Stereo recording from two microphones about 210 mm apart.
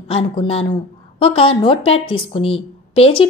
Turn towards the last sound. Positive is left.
turn(degrees=25)  # may be behind; listen again after turning